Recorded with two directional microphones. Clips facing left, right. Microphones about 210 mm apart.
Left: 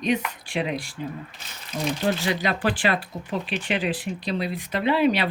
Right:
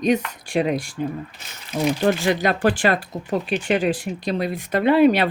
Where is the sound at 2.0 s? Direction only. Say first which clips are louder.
Right 4 dB; 50° right (ahead or behind).